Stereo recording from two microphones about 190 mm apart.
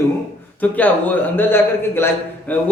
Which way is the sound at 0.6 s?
10° left (ahead or behind).